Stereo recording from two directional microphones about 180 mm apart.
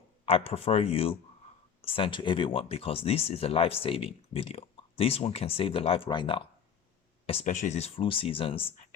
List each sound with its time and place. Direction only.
0.3 s speech: 30° left (ahead or behind)
7.3 s speech: 40° left (ahead or behind)